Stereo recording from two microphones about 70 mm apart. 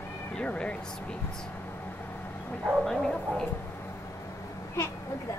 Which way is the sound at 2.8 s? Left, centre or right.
Centre.